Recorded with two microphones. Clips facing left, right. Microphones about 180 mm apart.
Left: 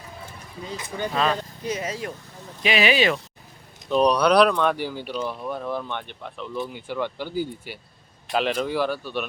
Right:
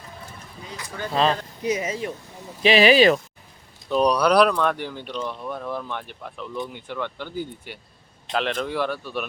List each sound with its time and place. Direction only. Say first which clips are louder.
0.8 s speech: left 2 dB; 20° left (ahead or behind)
1.1 s speech: right 3 dB; 30° right (ahead or behind)
1.6 s speech: right 5 dB; 10° right (ahead or behind)
2.6 s speech: right 5 dB; 35° right (ahead or behind)
3.8 s speech: left 1 dB; centre (ahead or behind)